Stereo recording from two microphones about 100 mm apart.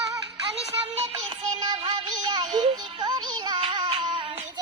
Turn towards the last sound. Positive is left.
turn(degrees=-65)  # may be behind; listen again after turning